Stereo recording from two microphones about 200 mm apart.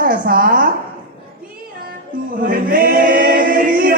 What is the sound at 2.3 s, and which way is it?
Choir, 45° right (ahead or behind).